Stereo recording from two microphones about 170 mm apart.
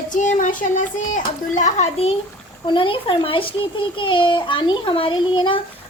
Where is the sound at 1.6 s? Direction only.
40° left (ahead or behind).